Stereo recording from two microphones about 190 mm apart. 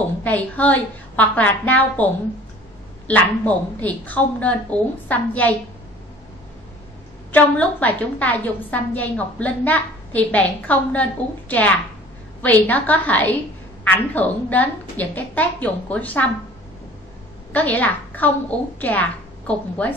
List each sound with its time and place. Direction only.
0.2 s a woman's voice: 10° left (ahead or behind)
3.1 s a woman's voice: 10° left (ahead or behind)
7.3 s a woman's voice: 10° left (ahead or behind)
17.5 s a woman's voice: 10° left (ahead or behind)